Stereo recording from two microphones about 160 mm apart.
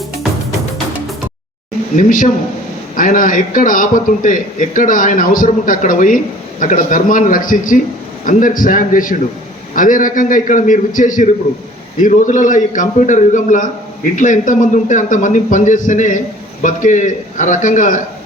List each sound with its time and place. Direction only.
2.0 s a man's voice: 55° left (ahead or behind)